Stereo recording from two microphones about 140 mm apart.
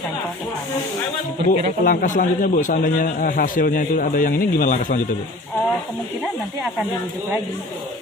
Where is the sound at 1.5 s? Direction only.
70° left (ahead or behind).